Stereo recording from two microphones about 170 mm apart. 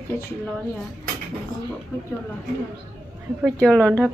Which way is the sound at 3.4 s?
5° left (ahead or behind).